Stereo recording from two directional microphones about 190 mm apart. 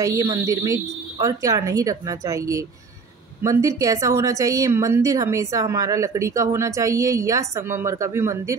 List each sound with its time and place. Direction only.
0.0 s a woman's voice: 20° right (ahead or behind)